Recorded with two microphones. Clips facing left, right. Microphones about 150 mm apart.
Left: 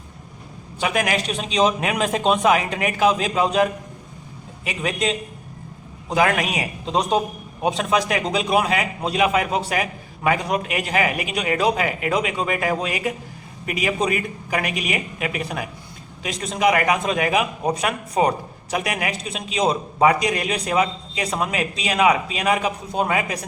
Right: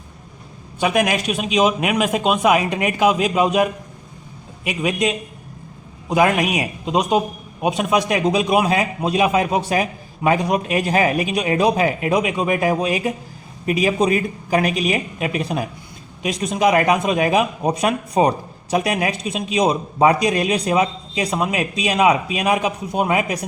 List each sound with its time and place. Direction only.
0.8 s a man's voice: 20° right (ahead or behind)